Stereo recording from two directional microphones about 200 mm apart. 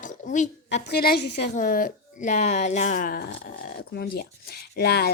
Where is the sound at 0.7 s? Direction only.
60° left (ahead or behind).